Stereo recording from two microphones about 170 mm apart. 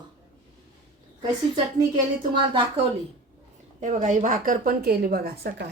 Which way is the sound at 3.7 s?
50° right (ahead or behind).